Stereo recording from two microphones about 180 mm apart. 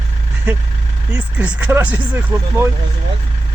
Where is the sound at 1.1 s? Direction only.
5° right (ahead or behind).